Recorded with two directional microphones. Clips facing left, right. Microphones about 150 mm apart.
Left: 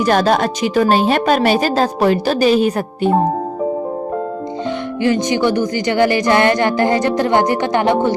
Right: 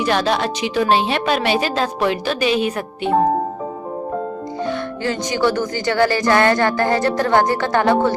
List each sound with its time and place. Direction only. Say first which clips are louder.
0.0 s a woman's voice: left 4 dB; 45° left (ahead or behind)
5.0 s a woman's voice: left 4 dB; 20° left (ahead or behind)